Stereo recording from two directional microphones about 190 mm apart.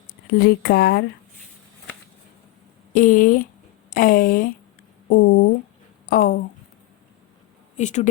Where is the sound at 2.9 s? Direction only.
45° left (ahead or behind).